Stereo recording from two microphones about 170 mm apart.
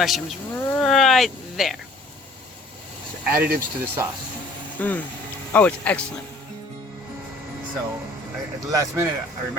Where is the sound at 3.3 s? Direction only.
65° right (ahead or behind).